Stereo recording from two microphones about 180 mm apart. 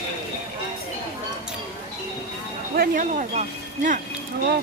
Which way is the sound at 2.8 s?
45° right (ahead or behind).